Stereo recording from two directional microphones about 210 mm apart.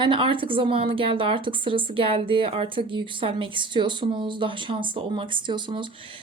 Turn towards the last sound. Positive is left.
turn(degrees=-25)  # may be behind; listen again after turning